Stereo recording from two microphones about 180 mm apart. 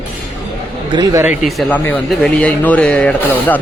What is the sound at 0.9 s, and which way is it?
Speech, 20° right (ahead or behind).